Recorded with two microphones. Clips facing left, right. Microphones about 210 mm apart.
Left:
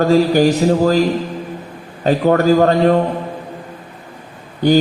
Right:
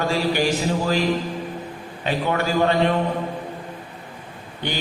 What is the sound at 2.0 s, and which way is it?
Speech, 40° left (ahead or behind).